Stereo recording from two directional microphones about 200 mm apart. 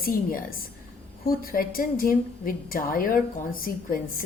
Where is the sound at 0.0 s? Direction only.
45° left (ahead or behind).